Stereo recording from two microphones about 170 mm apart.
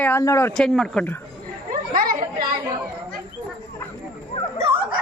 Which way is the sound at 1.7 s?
55° right (ahead or behind).